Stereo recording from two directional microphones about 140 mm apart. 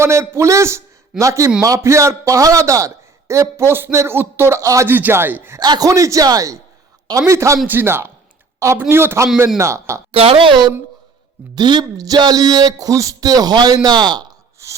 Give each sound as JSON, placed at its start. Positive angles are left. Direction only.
{"t": 0.0, "sound": "a man's voice", "side_deg": -20}
{"t": 5.5, "sound": "a man's voice", "side_deg": -30}
{"t": 10.1, "sound": "a woman's voice", "side_deg": -40}